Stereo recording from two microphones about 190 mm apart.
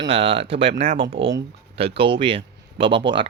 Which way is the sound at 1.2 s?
70° right (ahead or behind).